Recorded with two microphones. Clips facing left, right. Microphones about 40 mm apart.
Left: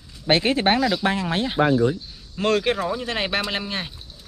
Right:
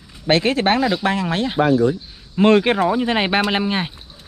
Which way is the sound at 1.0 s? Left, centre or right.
Right.